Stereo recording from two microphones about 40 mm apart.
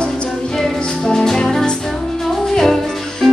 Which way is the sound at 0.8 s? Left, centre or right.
Centre.